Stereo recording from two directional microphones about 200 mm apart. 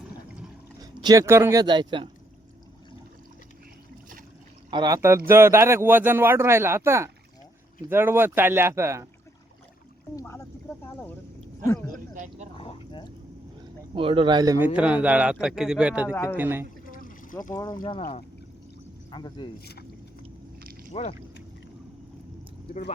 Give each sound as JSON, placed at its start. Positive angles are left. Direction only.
{"t": 0.8, "sound": "speech", "side_deg": -20}
{"t": 4.7, "sound": "speech", "side_deg": -20}
{"t": 10.2, "sound": "speech", "side_deg": 15}
{"t": 11.6, "sound": "speech", "side_deg": 15}
{"t": 11.9, "sound": "a sound", "side_deg": -40}
{"t": 12.5, "sound": "a sound", "side_deg": 25}
{"t": 13.9, "sound": "speech", "side_deg": -25}
{"t": 14.8, "sound": "a man's voice", "side_deg": -5}
{"t": 16.1, "sound": "speech", "side_deg": 10}
{"t": 16.4, "sound": "speech", "side_deg": -10}
{"t": 16.9, "sound": "water", "side_deg": 45}
{"t": 17.5, "sound": "speech", "side_deg": 20}
{"t": 20.9, "sound": "speech", "side_deg": 30}